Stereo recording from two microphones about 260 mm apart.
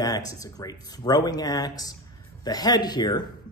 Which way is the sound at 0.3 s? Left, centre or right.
Centre.